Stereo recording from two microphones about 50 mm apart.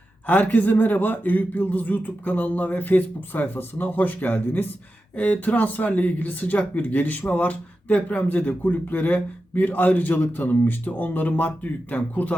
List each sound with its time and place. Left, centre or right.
0.3 s speech: left